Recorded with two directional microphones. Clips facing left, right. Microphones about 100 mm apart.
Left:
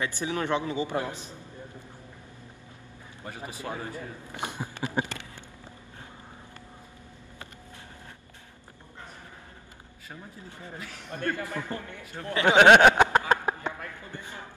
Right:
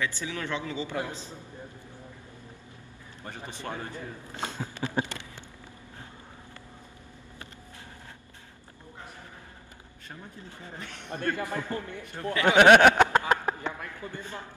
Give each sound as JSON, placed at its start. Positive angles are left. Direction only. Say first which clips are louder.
{"t": 0.0, "sound": "a man's voice", "louder": "left 3 dB", "side_deg": 20}
{"t": 3.3, "sound": "a man's voice", "louder": "left 1 dB", "side_deg": 10}
{"t": 4.4, "sound": "a sound", "louder": "even", "side_deg": 15}
{"t": 10.8, "sound": "a man's voice", "louder": "even", "side_deg": 5}
{"t": 11.2, "sound": "a man's voice", "louder": "right 1 dB", "side_deg": -20}
{"t": 12.4, "sound": "a sound", "louder": "even", "side_deg": 20}